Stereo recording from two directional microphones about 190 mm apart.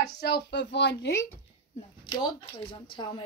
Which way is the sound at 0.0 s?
55° left (ahead or behind).